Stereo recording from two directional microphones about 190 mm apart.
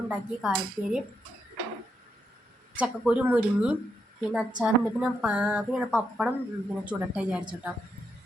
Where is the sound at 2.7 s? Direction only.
5° right (ahead or behind).